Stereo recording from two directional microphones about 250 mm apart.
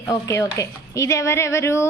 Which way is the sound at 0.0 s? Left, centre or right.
Centre.